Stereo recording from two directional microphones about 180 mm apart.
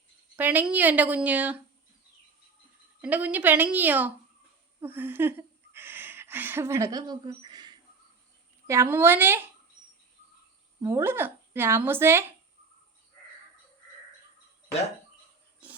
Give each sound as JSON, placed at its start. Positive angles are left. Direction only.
{"t": 0.3, "sound": "a woman's voice", "side_deg": -10}
{"t": 3.0, "sound": "a woman's voice", "side_deg": -10}
{"t": 7.3, "sound": "a sound", "side_deg": -25}
{"t": 8.6, "sound": "a woman's voice", "side_deg": -15}
{"t": 10.8, "sound": "a woman's voice", "side_deg": -15}